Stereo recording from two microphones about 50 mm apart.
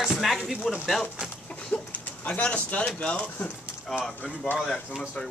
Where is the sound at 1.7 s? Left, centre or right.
Left.